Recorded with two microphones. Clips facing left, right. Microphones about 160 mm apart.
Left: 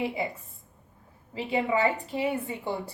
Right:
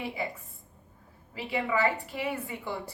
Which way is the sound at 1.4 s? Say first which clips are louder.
Left 3 dB; 20° left (ahead or behind).